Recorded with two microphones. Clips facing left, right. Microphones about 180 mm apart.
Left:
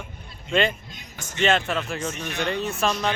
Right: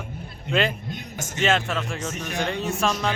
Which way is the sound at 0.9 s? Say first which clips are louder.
Right 4 dB; 45° right (ahead or behind).